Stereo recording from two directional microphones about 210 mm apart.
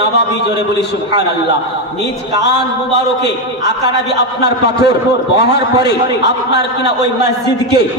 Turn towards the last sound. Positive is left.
turn(degrees=55)  # may be behind; listen again after turning